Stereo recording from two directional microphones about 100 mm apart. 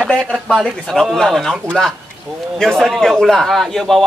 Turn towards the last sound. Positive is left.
turn(degrees=5)  # may be behind; listen again after turning